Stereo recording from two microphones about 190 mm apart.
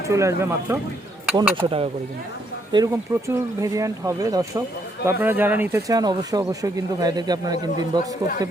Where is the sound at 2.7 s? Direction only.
15° right (ahead or behind).